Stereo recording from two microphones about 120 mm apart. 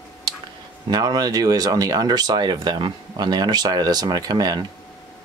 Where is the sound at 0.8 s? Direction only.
35° right (ahead or behind).